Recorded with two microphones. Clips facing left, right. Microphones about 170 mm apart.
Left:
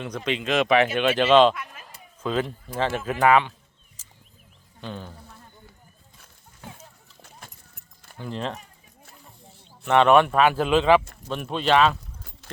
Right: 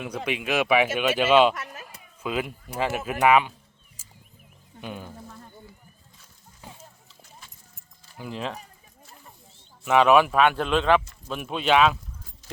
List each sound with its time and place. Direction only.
0.3 s speech: 10° right (ahead or behind)
4.0 s a sound: 10° right (ahead or behind)
4.8 s speech: 10° right (ahead or behind)
7.2 s clip-clop: 60° left (ahead or behind)
8.2 s speech: 5° right (ahead or behind)
9.8 s speech: 5° right (ahead or behind)
11.0 s speech: 55° left (ahead or behind)
11.3 s speech: 5° right (ahead or behind)